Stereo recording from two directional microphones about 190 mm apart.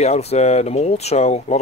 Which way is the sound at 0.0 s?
35° left (ahead or behind).